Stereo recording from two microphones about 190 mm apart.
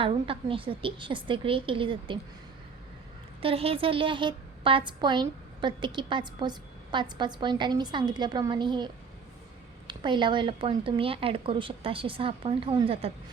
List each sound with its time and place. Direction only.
0.0 s a woman's voice: 30° right (ahead or behind)
3.4 s a woman's voice: 30° right (ahead or behind)